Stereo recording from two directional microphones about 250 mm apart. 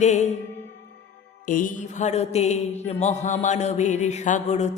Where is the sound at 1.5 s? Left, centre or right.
Left.